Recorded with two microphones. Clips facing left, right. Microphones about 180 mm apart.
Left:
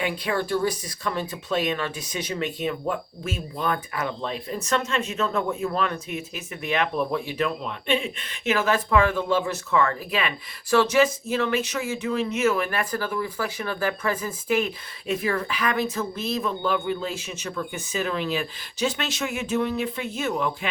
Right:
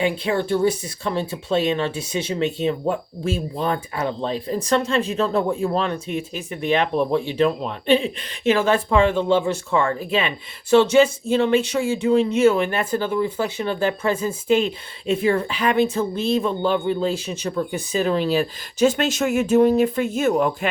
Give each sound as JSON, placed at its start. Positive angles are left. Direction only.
{"t": 0.0, "sound": "speech", "side_deg": -25}